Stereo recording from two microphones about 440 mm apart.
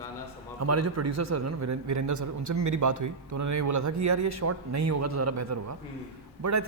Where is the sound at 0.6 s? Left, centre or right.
Right.